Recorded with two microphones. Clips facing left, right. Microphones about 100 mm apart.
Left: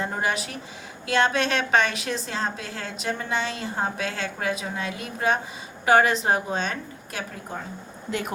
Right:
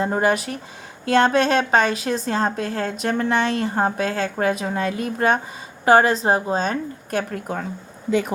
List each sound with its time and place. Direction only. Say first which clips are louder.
0.0 s a woman's voice: right 7 dB; 40° right (ahead or behind)